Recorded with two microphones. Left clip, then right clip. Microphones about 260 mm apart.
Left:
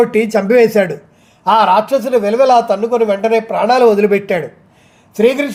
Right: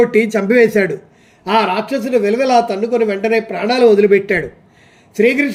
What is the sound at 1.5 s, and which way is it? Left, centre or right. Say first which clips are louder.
Speech: left 5 dB; left.